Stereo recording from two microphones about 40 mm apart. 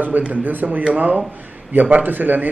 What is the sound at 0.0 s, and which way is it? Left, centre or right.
A man's voice, right.